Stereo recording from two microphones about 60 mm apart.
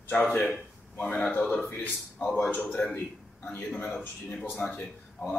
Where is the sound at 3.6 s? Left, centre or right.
Left.